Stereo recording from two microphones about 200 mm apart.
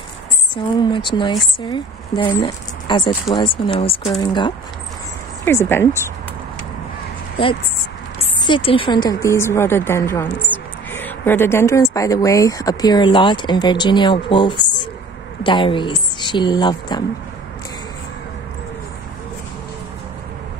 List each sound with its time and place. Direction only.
0.7 s speech: 25° left (ahead or behind)
8.2 s a woman's voice: 25° left (ahead or behind)